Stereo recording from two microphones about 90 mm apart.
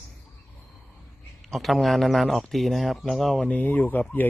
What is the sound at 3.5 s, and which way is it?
Speech, 20° left (ahead or behind).